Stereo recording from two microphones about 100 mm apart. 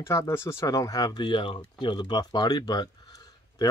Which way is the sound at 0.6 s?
40° left (ahead or behind).